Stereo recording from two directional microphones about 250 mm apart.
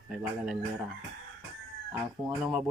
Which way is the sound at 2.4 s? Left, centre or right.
Centre.